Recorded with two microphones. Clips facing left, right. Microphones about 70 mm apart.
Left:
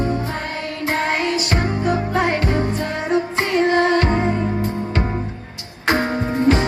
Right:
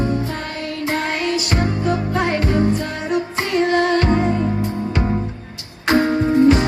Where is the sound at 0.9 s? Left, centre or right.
Left.